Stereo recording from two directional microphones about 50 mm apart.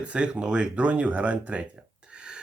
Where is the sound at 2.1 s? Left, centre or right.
Centre.